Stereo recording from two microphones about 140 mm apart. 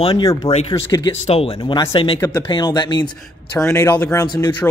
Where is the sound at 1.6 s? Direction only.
30° left (ahead or behind).